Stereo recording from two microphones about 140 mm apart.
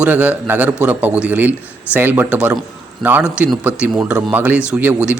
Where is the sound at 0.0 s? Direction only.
10° right (ahead or behind).